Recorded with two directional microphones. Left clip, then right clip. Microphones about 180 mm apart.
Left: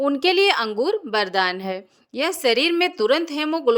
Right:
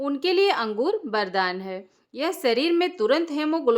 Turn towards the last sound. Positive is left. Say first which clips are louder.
# left 2 dB
turn(degrees=35)  # may be behind; listen again after turning